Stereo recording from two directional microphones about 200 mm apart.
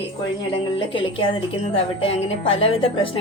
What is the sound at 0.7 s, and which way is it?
A woman's voice, 25° left (ahead or behind).